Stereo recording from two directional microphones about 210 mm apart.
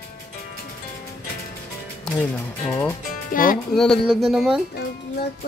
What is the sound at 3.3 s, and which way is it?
Speech, 40° left (ahead or behind).